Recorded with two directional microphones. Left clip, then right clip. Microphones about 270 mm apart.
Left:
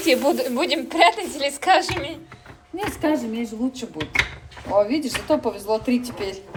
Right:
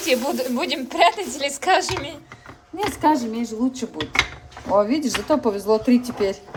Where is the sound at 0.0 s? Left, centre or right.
Centre.